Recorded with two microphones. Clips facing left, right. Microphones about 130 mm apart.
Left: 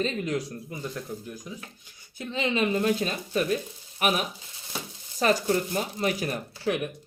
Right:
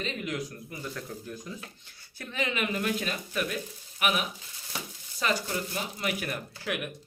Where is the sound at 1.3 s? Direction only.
10° left (ahead or behind).